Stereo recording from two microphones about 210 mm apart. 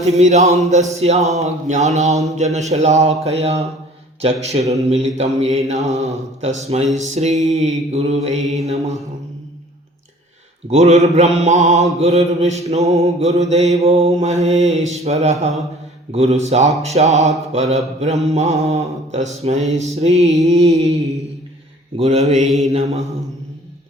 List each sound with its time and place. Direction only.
0.0 s mantra: 30° right (ahead or behind)
4.2 s a sound: 30° right (ahead or behind)
4.8 s mantra: 30° right (ahead or behind)
10.7 s mantra: 30° right (ahead or behind)
20.4 s a sound: 30° right (ahead or behind)
21.9 s mantra: 30° right (ahead or behind)